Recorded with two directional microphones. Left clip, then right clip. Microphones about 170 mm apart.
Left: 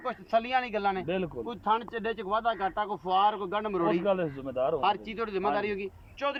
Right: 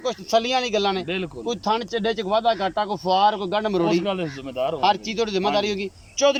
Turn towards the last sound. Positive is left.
turn(degrees=-25)  # may be behind; listen again after turning